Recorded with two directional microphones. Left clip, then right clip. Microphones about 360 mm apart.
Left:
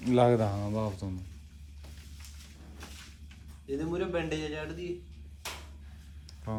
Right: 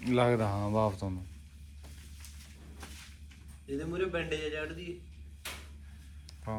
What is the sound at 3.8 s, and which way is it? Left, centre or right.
Speech, left.